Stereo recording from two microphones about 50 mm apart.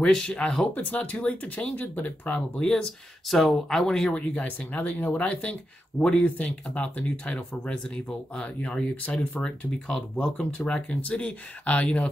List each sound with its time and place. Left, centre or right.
0.0 s speech: centre
0.7 s speech: left
2.6 s speech: centre
3.3 s speech: centre
3.6 s speech: centre
4.3 s speech: left
5.9 s speech: centre
6.2 s speech: left
8.4 s speech: left